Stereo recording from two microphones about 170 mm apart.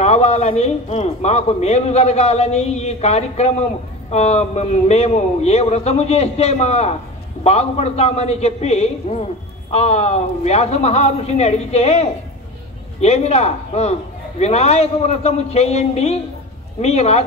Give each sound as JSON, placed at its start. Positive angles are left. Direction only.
{"t": 0.0, "sound": "a man's voice", "side_deg": 40}